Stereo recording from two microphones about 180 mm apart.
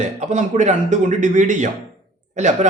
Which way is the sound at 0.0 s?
40° right (ahead or behind).